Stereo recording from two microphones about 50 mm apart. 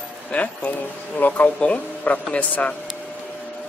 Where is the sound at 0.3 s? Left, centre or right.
Left.